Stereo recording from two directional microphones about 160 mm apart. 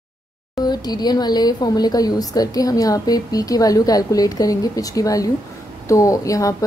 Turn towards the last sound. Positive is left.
turn(degrees=20)  # may be behind; listen again after turning